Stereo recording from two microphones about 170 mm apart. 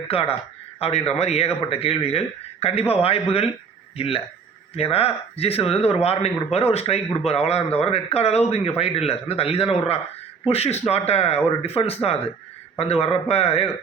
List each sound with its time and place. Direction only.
0.1 s speech: 35° left (ahead or behind)